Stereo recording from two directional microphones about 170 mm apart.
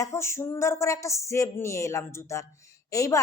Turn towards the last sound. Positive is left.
turn(degrees=20)  # may be behind; listen again after turning